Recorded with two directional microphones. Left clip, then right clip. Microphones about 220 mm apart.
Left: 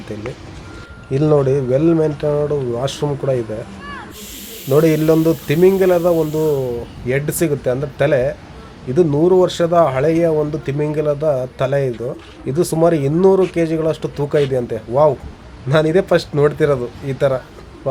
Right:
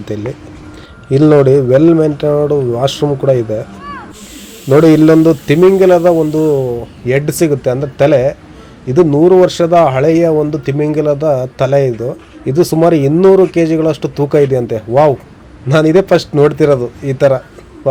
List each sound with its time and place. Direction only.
0.1 s speech: 15° right (ahead or behind)
4.7 s speech: 15° right (ahead or behind)